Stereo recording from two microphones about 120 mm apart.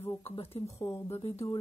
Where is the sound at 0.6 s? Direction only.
25° left (ahead or behind).